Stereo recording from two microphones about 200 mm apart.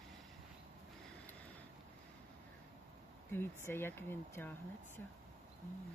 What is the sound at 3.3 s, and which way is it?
Speech, 10° left (ahead or behind).